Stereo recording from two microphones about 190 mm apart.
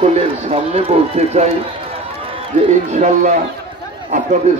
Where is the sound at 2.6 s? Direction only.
40° right (ahead or behind).